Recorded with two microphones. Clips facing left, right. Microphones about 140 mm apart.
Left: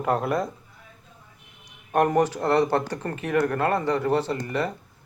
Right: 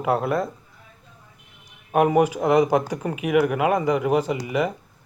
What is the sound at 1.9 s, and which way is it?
Speech, 5° right (ahead or behind).